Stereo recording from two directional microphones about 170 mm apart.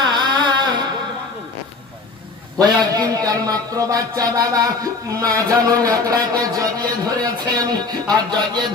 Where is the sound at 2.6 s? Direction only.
20° right (ahead or behind).